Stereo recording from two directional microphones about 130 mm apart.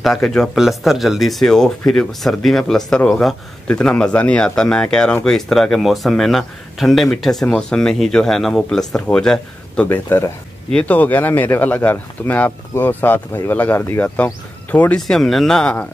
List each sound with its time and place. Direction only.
0.0 s speech: 5° left (ahead or behind)
9.8 s speech: 20° left (ahead or behind)
15.0 s speech: 5° left (ahead or behind)